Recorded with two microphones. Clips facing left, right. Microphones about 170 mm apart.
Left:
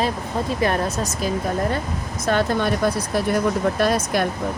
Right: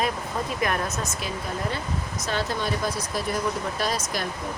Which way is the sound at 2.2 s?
55° left (ahead or behind).